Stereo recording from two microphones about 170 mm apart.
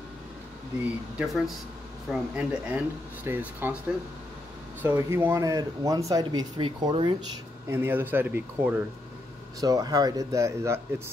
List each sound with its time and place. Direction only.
1.1 s speech: centre (ahead or behind)
4.8 s speech: 15° right (ahead or behind)
7.6 s speech: 15° right (ahead or behind)
9.6 s speech: 20° right (ahead or behind)